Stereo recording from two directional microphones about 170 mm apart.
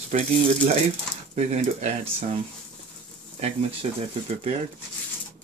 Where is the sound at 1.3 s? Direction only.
40° right (ahead or behind).